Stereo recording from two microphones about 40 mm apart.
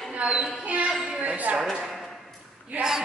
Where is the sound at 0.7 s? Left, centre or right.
Right.